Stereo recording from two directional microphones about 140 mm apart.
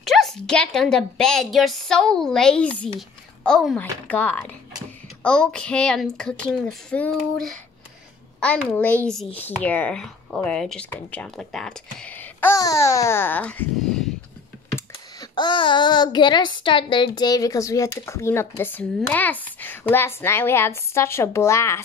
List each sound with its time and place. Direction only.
0.0 s a woman's voice: centre (ahead or behind)
8.6 s a woman's voice: 10° left (ahead or behind)
12.5 s a woman's voice: 25° left (ahead or behind); by 14.0 s 5° left (ahead or behind)
15.1 s a woman's voice: 35° left (ahead or behind)